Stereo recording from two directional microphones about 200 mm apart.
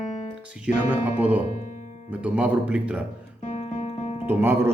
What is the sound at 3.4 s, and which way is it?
Guitar, 35° left (ahead or behind).